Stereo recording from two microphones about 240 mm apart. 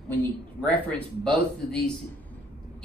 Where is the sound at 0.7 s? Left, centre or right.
Centre.